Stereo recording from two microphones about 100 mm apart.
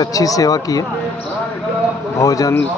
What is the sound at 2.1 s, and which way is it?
Speech, 35° left (ahead or behind).